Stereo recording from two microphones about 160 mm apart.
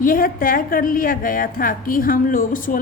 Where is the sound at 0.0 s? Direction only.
60° left (ahead or behind).